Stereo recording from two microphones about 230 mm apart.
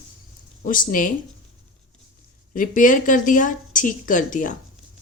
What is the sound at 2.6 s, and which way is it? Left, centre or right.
Speech, left.